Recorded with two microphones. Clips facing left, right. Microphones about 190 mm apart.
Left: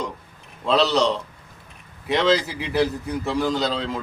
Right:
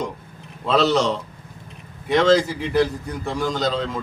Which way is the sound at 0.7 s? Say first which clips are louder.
Right 1 dB; 50° right (ahead or behind).